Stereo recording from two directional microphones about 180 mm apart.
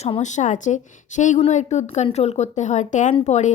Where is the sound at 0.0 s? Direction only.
40° left (ahead or behind).